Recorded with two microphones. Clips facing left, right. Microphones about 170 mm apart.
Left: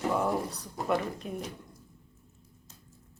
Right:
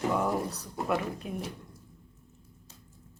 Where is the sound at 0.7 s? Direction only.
Centre (ahead or behind).